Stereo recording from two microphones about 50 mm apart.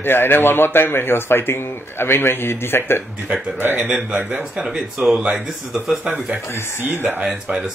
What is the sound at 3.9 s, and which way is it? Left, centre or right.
Speech, centre.